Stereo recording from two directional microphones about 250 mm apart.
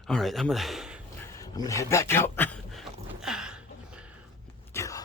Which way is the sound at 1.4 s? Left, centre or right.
Centre.